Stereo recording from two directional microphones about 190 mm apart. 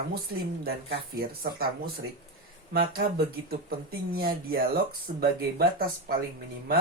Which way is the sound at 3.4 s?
55° right (ahead or behind).